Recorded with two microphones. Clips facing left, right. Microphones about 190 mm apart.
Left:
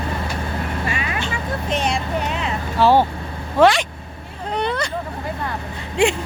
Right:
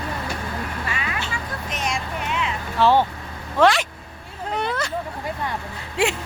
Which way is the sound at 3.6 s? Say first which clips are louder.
Left 3 dB; centre (ahead or behind).